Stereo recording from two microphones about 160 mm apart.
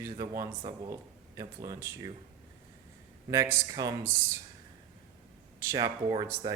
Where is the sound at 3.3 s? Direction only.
20° right (ahead or behind).